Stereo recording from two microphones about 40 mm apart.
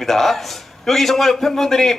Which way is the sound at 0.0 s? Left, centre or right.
Centre.